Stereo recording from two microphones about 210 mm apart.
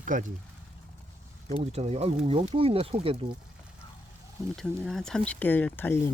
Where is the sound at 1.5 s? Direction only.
30° right (ahead or behind).